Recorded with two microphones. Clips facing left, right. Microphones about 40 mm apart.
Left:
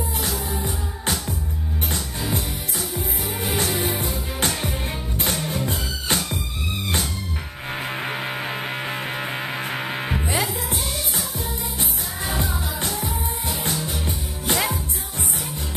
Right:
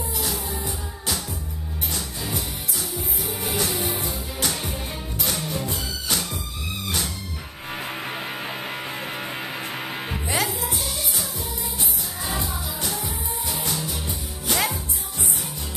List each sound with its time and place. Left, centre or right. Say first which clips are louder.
0.5 s music: left 3 dB; left
3.0 s music: left 3 dB; left
7.7 s music: left 3 dB; left
10.5 s music: left 1 dB; left
12.3 s music: left 3 dB; left